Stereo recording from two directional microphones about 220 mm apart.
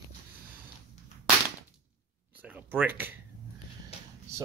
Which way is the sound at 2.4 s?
5° right (ahead or behind).